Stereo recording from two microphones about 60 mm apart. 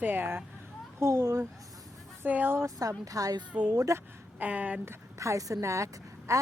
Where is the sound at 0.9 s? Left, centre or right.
Right.